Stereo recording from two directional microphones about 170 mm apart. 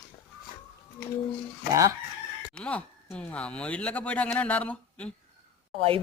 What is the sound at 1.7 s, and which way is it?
Speech, 20° right (ahead or behind).